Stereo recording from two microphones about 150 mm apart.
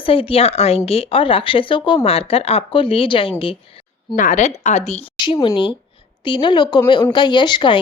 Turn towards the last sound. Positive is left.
turn(degrees=30)  # may be behind; listen again after turning